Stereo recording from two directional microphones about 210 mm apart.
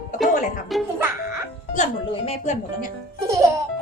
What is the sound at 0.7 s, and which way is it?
Speech, centre (ahead or behind).